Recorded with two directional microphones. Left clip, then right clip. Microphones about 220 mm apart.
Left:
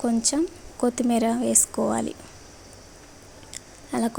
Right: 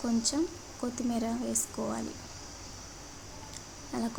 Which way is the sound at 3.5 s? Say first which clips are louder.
Left 9 dB; 35° left (ahead or behind).